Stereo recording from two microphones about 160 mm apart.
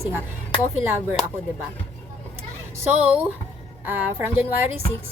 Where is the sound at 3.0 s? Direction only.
5° right (ahead or behind).